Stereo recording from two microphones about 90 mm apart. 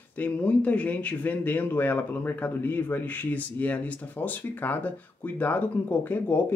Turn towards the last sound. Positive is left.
turn(degrees=25)  # may be behind; listen again after turning